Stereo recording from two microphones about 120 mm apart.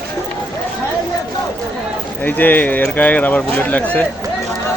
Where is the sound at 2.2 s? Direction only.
15° left (ahead or behind).